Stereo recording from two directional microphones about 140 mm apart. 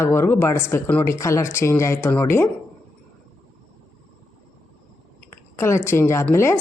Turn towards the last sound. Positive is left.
turn(degrees=20)  # may be behind; listen again after turning